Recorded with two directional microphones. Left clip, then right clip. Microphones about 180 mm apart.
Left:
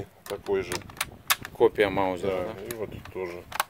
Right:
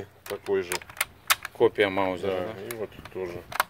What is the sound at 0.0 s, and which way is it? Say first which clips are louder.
Speech: even; 25° left (ahead or behind).